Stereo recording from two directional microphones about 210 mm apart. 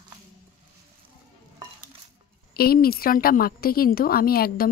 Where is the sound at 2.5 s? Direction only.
45° left (ahead or behind).